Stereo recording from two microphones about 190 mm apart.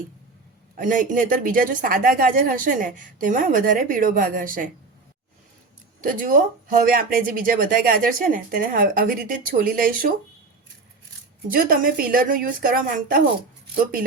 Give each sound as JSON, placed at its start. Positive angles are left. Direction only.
{"t": 0.8, "sound": "speech", "side_deg": -45}
{"t": 6.0, "sound": "speech", "side_deg": -45}
{"t": 11.5, "sound": "speech", "side_deg": -50}